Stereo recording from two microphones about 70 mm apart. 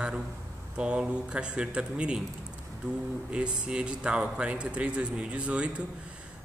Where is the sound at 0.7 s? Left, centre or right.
Centre.